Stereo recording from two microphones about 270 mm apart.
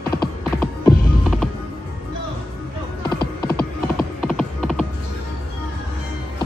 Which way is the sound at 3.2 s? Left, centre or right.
Centre.